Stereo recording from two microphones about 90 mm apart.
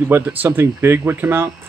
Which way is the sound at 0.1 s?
20° right (ahead or behind).